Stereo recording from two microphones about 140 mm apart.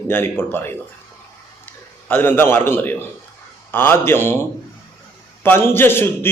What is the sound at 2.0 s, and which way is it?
A man's voice, 15° left (ahead or behind).